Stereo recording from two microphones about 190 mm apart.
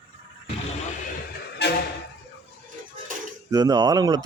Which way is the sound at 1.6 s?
60° left (ahead or behind).